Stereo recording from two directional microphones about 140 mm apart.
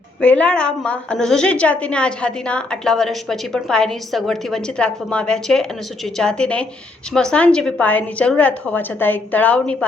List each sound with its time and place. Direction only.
0.2 s a woman's voice: 10° left (ahead or behind)